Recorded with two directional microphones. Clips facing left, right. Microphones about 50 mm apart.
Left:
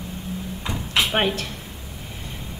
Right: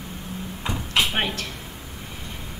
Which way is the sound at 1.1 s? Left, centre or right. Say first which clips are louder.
Left 4 dB; centre.